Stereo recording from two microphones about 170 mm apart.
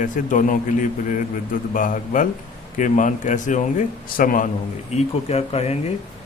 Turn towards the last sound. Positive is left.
turn(degrees=40)  # may be behind; listen again after turning